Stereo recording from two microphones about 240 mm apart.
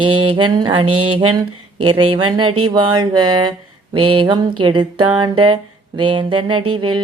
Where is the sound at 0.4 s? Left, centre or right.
Centre.